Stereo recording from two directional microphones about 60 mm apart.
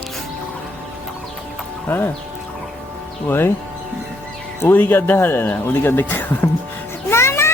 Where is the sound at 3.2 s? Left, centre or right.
Left.